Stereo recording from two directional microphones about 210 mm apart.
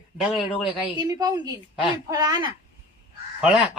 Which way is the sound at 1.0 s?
20° right (ahead or behind).